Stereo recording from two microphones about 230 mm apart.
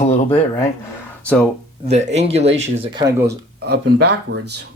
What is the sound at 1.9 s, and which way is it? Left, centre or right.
Speech, right.